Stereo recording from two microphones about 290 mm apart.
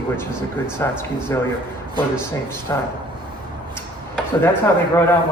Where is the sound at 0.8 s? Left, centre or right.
Centre.